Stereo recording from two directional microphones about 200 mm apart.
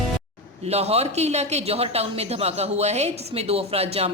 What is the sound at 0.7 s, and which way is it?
Speech, 30° right (ahead or behind).